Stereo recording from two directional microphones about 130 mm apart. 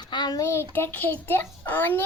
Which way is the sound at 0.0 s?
35° left (ahead or behind).